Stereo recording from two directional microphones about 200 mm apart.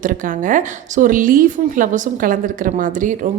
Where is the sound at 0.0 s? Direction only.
40° right (ahead or behind).